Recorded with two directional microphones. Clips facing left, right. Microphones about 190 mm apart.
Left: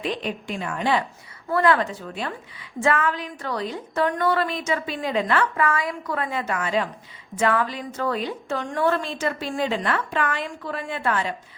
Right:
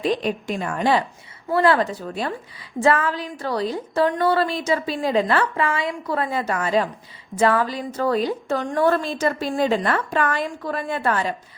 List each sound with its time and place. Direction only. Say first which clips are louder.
0.0 s a woman's voice: right 5 dB; 40° right (ahead or behind)